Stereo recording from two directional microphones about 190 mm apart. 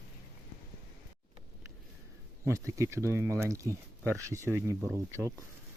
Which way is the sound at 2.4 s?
15° right (ahead or behind).